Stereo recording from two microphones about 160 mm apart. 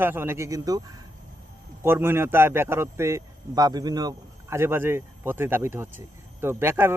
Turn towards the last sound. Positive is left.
turn(degrees=-15)  # may be behind; listen again after turning